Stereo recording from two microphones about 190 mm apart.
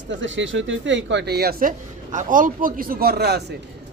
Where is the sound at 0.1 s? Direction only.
75° right (ahead or behind).